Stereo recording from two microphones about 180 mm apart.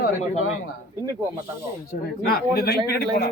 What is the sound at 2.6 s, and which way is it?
Speech, 60° left (ahead or behind).